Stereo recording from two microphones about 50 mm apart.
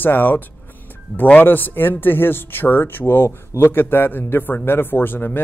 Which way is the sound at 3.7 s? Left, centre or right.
Left.